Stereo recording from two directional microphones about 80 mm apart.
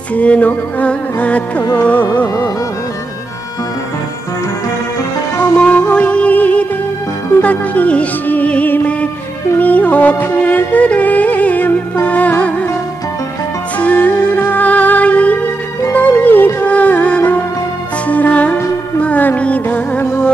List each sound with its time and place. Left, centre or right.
0.1 s music: centre
1.8 s carnatic music: left
2.2 s music: left
5.6 s music: centre
13.7 s music: centre